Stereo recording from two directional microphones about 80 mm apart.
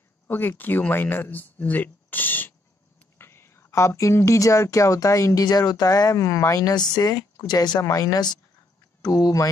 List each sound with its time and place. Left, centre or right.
0.3 s speech: left
7.8 s speech: left